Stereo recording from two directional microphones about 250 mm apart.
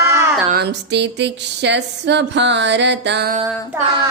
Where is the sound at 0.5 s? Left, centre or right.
Right.